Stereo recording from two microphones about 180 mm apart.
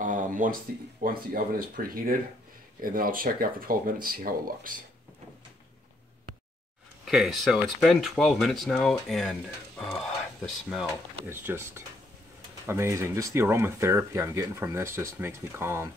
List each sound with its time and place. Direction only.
0.0 s a sound: 45° right (ahead or behind)
1.0 s speech: 55° right (ahead or behind)
7.1 s speech: centre (ahead or behind)
10.4 s speech: centre (ahead or behind)
11.2 s speech: 15° right (ahead or behind)